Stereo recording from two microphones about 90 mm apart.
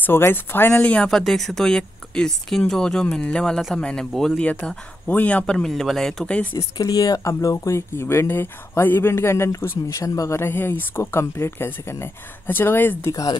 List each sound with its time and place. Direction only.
0.0 s speech: 25° left (ahead or behind)
0.9 s speech: 5° left (ahead or behind)
6.8 s speech: 45° left (ahead or behind); by 13.1 s 25° left (ahead or behind)